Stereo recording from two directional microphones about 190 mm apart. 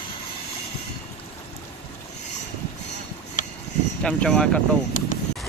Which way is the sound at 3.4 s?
45° left (ahead or behind).